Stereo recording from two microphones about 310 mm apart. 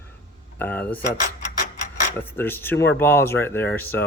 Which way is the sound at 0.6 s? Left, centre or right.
Centre.